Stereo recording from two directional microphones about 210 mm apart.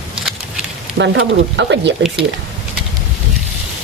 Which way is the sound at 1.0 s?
60° right (ahead or behind).